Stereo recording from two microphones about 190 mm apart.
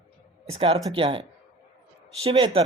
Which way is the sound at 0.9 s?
25° right (ahead or behind).